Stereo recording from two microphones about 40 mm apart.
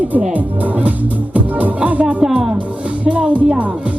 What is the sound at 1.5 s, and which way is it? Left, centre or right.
Music, right.